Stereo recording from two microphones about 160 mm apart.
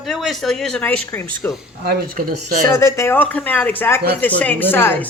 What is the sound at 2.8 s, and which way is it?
A woman's voice, 15° left (ahead or behind).